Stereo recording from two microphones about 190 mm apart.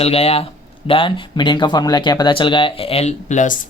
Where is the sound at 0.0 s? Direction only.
30° left (ahead or behind).